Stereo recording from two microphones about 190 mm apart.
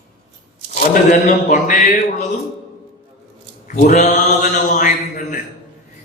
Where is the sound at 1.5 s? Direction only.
40° left (ahead or behind).